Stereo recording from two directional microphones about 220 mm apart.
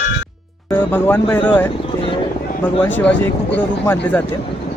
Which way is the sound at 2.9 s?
10° left (ahead or behind).